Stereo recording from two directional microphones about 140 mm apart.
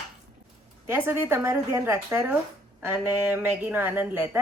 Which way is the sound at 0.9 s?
15° right (ahead or behind).